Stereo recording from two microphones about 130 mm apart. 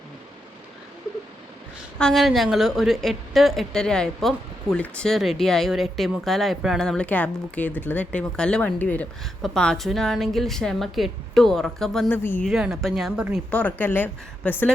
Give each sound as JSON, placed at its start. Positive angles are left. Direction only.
{"t": 2.0, "sound": "a woman's voice", "side_deg": 5}
{"t": 12.0, "sound": "a woman's voice", "side_deg": 15}
{"t": 12.5, "sound": "a woman's voice", "side_deg": 0}
{"t": 13.5, "sound": "a woman's voice", "side_deg": 10}